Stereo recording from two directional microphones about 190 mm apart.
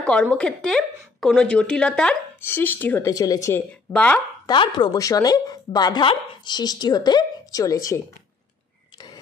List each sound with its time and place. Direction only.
0.0 s a woman's voice: 5° left (ahead or behind)
4.5 s a woman's voice: 25° left (ahead or behind)
8.9 s a sound: 20° left (ahead or behind)